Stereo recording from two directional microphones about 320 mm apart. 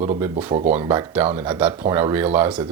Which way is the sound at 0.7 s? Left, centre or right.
Centre.